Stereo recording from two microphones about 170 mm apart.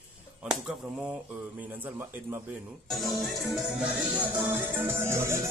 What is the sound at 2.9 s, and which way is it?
Music, centre (ahead or behind).